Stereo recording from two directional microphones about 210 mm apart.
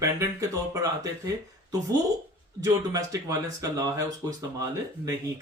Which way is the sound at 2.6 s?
15° right (ahead or behind).